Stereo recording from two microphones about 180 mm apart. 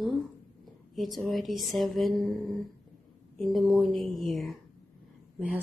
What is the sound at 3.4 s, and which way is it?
Speech, centre (ahead or behind).